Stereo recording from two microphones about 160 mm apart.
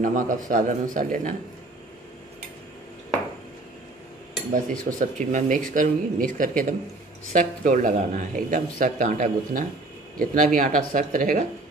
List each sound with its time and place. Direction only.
0.0 s speech: 55° right (ahead or behind)
4.6 s speech: 55° right (ahead or behind)